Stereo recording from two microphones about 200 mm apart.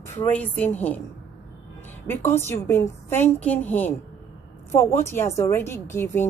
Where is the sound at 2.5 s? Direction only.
15° left (ahead or behind).